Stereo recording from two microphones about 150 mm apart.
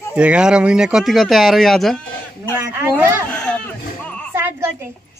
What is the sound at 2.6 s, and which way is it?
Speech, 15° right (ahead or behind).